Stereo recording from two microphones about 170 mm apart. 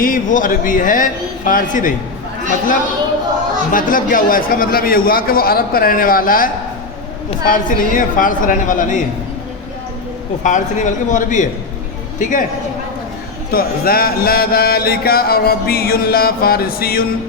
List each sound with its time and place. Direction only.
0.0 s a man's voice: 50° left (ahead or behind)
3.7 s a man's voice: 55° left (ahead or behind)
10.4 s a man's voice: 45° left (ahead or behind)
13.5 s speech: 60° left (ahead or behind)